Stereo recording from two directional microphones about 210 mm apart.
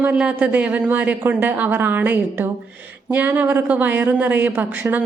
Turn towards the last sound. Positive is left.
turn(degrees=-10)  # may be behind; listen again after turning